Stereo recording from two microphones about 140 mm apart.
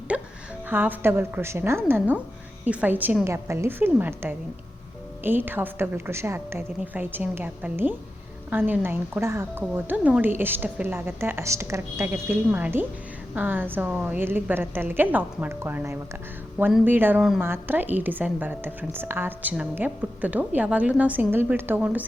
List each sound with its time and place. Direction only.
0.1 s a woman's voice: 5° right (ahead or behind)